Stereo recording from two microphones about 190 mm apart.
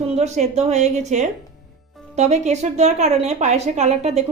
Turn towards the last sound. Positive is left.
turn(degrees=-35)  # may be behind; listen again after turning